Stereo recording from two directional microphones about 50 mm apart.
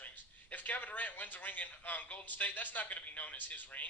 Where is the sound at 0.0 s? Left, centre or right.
Left.